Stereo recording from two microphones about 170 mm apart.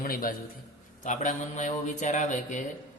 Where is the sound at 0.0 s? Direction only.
60° left (ahead or behind).